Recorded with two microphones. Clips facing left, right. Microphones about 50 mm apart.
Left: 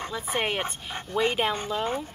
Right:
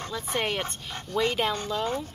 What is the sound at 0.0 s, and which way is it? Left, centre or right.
Speech, centre.